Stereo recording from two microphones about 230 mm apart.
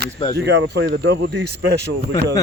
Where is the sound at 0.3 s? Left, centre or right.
Right.